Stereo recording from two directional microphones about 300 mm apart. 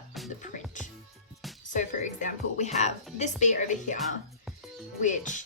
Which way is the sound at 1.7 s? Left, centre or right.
Left.